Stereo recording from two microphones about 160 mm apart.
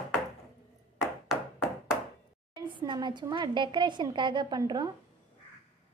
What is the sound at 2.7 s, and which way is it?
A woman's voice, 30° right (ahead or behind).